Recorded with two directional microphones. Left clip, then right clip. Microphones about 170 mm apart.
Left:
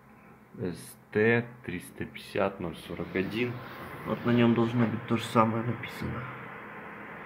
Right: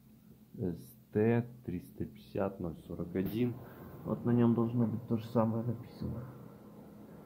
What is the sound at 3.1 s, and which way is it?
Speech, 20° right (ahead or behind).